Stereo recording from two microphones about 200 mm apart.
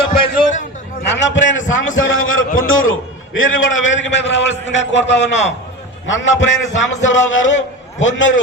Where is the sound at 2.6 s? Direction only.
90° left.